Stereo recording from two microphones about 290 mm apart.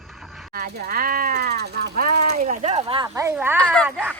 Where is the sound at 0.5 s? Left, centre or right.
Right; by 3.6 s centre.